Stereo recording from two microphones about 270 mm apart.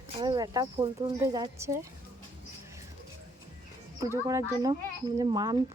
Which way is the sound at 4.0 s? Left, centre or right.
Centre.